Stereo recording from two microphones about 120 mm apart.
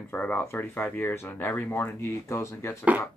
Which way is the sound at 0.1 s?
15° left (ahead or behind).